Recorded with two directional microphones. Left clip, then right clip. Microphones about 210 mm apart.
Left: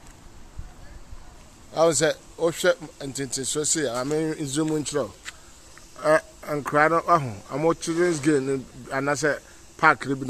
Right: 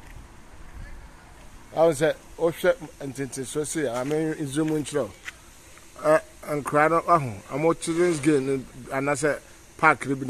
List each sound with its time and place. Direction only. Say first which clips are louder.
1.7 s speech: even; 5° right (ahead or behind)